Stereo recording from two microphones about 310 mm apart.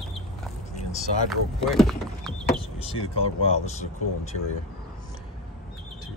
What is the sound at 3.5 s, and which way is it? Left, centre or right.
Speech, left.